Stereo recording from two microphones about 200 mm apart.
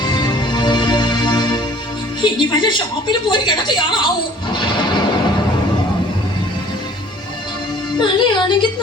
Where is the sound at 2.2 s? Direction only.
25° left (ahead or behind).